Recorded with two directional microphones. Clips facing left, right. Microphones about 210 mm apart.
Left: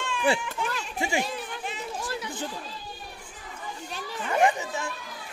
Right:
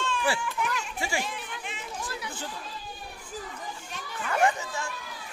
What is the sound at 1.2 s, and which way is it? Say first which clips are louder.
Chatter: left 4 dB; 35° left (ahead or behind).